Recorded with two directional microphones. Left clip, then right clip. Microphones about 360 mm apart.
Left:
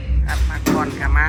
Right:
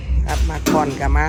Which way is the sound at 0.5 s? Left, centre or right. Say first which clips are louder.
Right 2 dB; centre.